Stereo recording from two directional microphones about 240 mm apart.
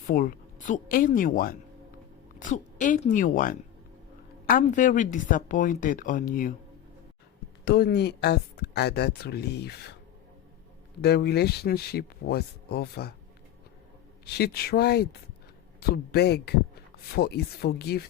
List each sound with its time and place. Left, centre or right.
0.1 s speech: left
7.6 s speech: left
11.0 s speech: left
14.3 s speech: left